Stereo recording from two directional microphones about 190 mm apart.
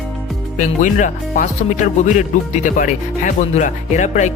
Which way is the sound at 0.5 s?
40° left (ahead or behind).